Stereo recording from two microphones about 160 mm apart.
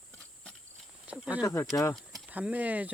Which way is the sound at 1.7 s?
20° left (ahead or behind).